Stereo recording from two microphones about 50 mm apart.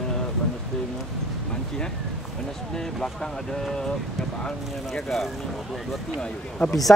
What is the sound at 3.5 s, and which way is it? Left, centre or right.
Speech, centre.